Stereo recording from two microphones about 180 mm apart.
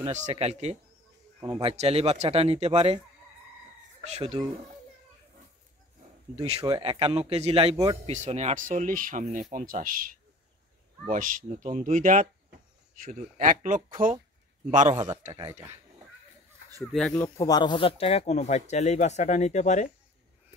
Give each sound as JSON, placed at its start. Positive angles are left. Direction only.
{"t": 0.0, "sound": "speech", "side_deg": -35}
{"t": 1.4, "sound": "speech", "side_deg": -30}
{"t": 4.0, "sound": "speech", "side_deg": -35}
{"t": 6.3, "sound": "speech", "side_deg": -35}
{"t": 7.7, "sound": "a man's voice", "side_deg": -20}
{"t": 8.1, "sound": "speech", "side_deg": -40}
{"t": 16.9, "sound": "speech", "side_deg": 5}
{"t": 17.2, "sound": "speech", "side_deg": 20}